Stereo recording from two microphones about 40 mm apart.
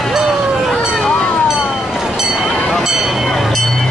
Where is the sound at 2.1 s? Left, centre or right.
Centre.